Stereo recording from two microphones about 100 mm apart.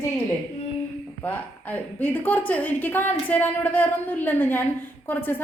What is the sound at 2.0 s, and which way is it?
A woman's voice, 15° left (ahead or behind).